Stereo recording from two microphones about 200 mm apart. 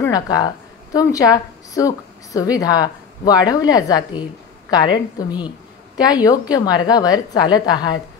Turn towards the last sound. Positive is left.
turn(degrees=20)  # may be behind; listen again after turning